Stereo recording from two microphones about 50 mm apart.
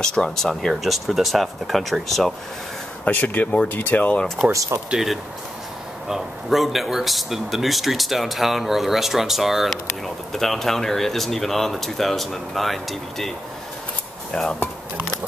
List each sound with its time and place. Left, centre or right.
0.0 s speech: centre
0.8 s a man's voice: centre
3.1 s speech: left
4.5 s speech: right
4.9 s a man's voice: centre
14.3 s speech: centre